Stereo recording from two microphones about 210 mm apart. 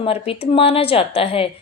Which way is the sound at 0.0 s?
25° left (ahead or behind).